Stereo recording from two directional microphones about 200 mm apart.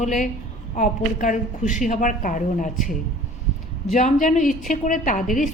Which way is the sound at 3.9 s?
40° left (ahead or behind).